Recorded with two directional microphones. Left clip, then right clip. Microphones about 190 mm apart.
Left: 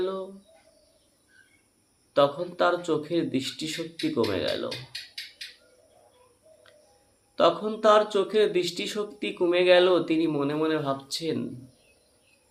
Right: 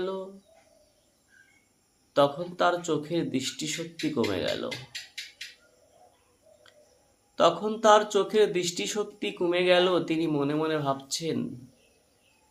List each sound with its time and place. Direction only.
0.0 s speech: 5° right (ahead or behind)
2.1 s speech: 5° right (ahead or behind)
7.3 s speech: 10° right (ahead or behind)